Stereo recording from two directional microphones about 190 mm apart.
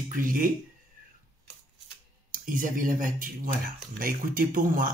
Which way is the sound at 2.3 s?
45° right (ahead or behind).